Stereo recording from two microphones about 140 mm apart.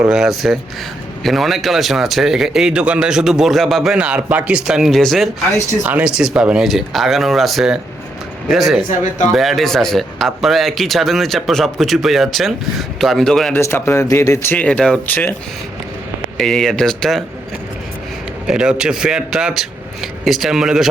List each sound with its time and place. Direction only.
0.0 s speech: 5° right (ahead or behind)
5.8 s speech: 10° right (ahead or behind)
13.5 s speech: 15° left (ahead or behind)
16.4 s speech: centre (ahead or behind)
18.4 s speech: 5° right (ahead or behind)